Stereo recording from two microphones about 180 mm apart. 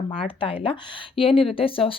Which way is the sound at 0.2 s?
30° left (ahead or behind).